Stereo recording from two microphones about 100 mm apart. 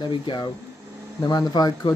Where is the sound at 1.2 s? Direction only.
35° left (ahead or behind).